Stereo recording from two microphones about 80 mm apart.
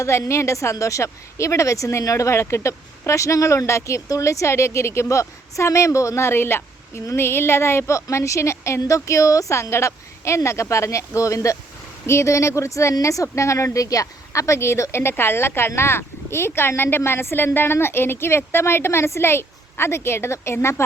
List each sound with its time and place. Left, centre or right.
0.0 s speech: left